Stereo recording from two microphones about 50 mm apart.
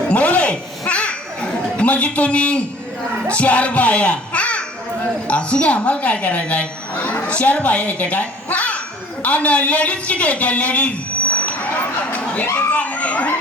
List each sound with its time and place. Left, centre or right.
0.1 s chatter: left
3.2 s a child's voice: left
12.1 s a sound: left
12.5 s speech: left